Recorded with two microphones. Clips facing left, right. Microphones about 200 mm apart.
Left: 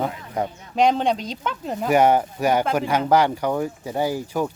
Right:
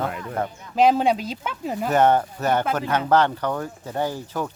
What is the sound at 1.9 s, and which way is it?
Speech, 10° left (ahead or behind).